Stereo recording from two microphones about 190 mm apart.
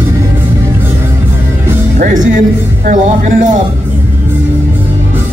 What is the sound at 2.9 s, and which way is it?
Music, 40° right (ahead or behind).